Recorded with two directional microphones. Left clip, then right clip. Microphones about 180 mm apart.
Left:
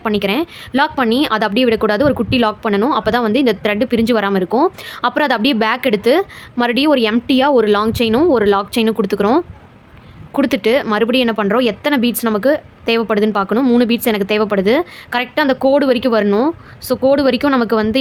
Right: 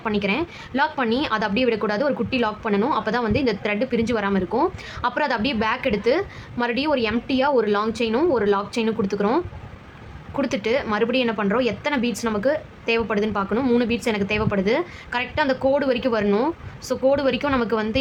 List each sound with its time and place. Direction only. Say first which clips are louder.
0.0 s a woman's voice: left 7 dB; 45° left (ahead or behind)